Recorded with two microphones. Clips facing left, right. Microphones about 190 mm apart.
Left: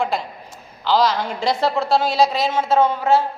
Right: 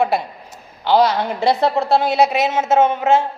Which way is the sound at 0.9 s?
60° right (ahead or behind).